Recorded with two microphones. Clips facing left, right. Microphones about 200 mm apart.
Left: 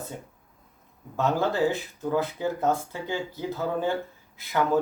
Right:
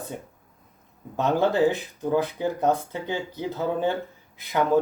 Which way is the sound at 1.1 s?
20° right (ahead or behind).